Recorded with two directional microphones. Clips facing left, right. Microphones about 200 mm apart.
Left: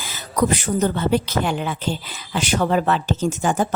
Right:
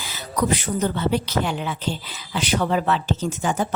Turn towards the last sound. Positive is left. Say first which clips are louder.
# left 3 dB
turn(degrees=50)  # may be behind; listen again after turning